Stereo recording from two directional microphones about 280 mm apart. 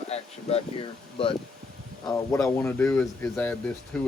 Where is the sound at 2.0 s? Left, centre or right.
Centre.